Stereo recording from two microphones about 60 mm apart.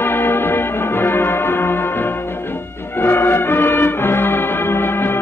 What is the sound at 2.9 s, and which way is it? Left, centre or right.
Music, left.